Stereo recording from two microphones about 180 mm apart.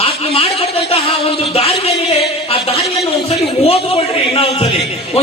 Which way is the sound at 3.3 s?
30° left (ahead or behind).